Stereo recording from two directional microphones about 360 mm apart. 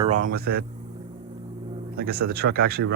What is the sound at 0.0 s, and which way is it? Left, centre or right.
Speech, centre.